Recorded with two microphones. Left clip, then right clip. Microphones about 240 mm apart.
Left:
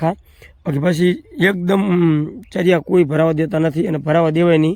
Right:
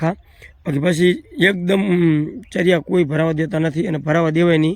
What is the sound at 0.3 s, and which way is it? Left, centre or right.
A man's voice, centre.